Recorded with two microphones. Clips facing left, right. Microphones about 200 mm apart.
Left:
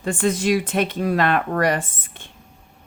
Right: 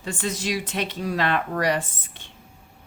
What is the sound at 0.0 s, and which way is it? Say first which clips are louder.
Speech: left 8 dB; 55° left (ahead or behind).